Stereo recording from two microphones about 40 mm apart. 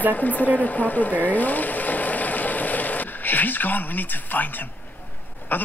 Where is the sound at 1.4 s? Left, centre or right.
Left.